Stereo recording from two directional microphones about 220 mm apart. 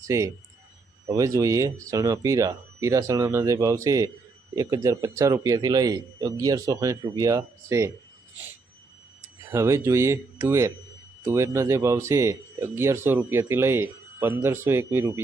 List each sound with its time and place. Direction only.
0.1 s a man's voice: 15° right (ahead or behind)
9.5 s a man's voice: 15° right (ahead or behind)